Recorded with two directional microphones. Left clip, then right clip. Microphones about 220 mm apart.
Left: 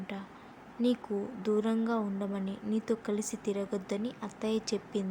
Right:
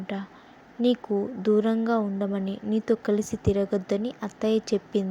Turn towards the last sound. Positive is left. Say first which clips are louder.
# right 8 dB
turn(degrees=-25)  # may be behind; listen again after turning